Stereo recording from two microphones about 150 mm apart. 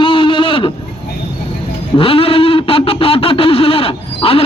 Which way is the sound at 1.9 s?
35° left (ahead or behind).